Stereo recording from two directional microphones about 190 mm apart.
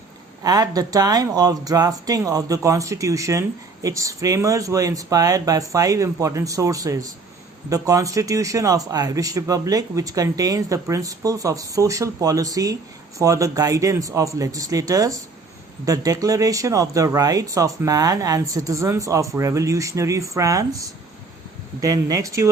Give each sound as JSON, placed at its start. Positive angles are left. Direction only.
{"t": 0.4, "sound": "a man's voice", "side_deg": -20}